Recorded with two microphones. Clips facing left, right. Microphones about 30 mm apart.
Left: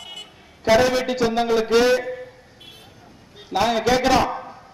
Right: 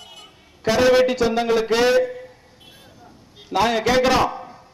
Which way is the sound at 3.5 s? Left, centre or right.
Centre.